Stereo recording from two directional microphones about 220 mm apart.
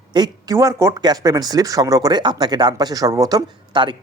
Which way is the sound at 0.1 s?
15° right (ahead or behind).